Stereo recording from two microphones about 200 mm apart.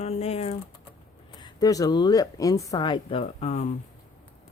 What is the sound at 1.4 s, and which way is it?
Speech, 20° left (ahead or behind).